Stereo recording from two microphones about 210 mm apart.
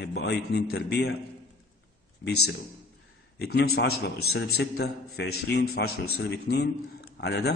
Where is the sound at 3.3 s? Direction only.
50° left (ahead or behind).